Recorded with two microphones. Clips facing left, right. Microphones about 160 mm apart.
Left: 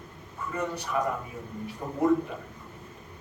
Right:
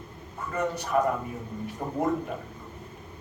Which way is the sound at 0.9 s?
50° right (ahead or behind).